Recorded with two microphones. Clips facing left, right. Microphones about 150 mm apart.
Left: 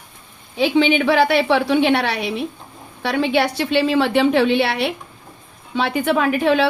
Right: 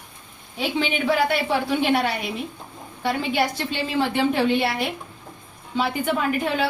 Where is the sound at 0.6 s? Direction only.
90° left.